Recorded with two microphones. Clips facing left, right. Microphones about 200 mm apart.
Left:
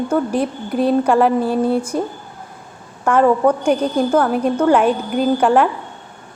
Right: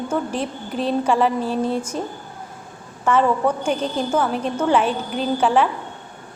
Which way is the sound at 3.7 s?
10° left (ahead or behind).